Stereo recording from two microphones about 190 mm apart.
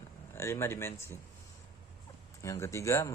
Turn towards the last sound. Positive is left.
turn(degrees=15)  # may be behind; listen again after turning